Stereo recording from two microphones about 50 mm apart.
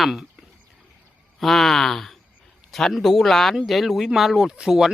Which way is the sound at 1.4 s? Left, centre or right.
Centre.